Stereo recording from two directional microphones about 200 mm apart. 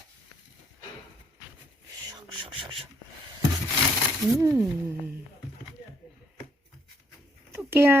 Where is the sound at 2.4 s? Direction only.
25° right (ahead or behind).